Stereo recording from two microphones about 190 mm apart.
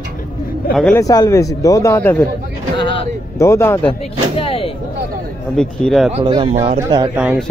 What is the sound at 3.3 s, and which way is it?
Speech, 15° left (ahead or behind).